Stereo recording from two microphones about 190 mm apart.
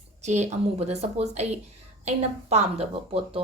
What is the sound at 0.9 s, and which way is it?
Speech, 35° right (ahead or behind).